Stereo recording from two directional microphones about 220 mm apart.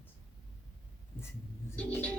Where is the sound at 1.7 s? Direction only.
5° left (ahead or behind).